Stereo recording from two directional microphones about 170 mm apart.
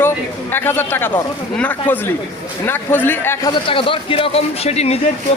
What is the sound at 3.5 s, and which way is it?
A man's voice, 30° left (ahead or behind).